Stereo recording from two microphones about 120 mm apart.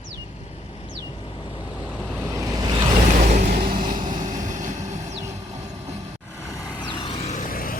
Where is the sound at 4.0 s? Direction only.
40° right (ahead or behind).